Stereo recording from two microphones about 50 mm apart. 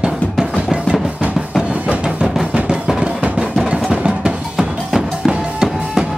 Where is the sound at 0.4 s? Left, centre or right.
Centre.